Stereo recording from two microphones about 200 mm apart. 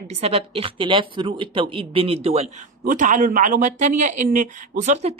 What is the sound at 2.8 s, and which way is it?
Speech, 40° right (ahead or behind).